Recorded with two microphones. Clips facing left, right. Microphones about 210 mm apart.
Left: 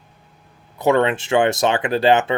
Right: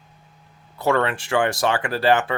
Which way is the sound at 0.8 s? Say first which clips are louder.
Left 4 dB; 20° left (ahead or behind).